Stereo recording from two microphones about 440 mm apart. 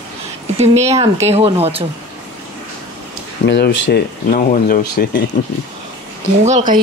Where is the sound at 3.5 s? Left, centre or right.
Left.